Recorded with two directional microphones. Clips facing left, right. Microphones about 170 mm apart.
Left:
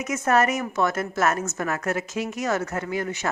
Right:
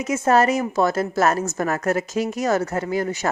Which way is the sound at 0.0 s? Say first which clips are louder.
Right 4 dB; 30° right (ahead or behind).